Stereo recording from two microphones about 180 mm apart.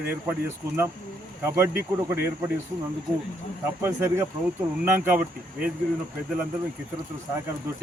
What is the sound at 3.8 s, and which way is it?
Speech, 15° right (ahead or behind).